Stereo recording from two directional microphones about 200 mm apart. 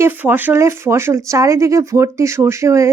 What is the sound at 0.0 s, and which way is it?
Speech, 10° right (ahead or behind).